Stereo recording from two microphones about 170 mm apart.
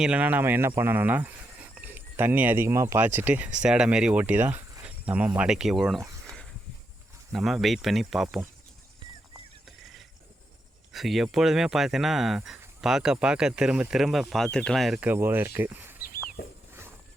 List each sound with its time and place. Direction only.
0.0 s speech: 10° right (ahead or behind)
7.3 s speech: centre (ahead or behind)
9.6 s a sound: centre (ahead or behind)
10.9 s speech: centre (ahead or behind)
15.1 s speech: 10° right (ahead or behind)
16.4 s a sound: 70° left (ahead or behind)